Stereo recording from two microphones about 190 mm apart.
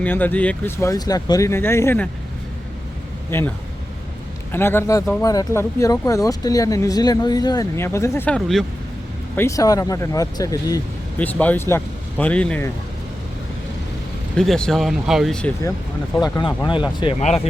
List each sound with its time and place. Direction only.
0.0 s speech: 10° left (ahead or behind)
3.2 s speech: 10° left (ahead or behind)
4.5 s speech: 10° left (ahead or behind)
8.4 s speech: centre (ahead or behind)
9.3 s speech: 15° left (ahead or behind)
14.3 s speech: 5° left (ahead or behind)
16.2 s speech: 20° left (ahead or behind)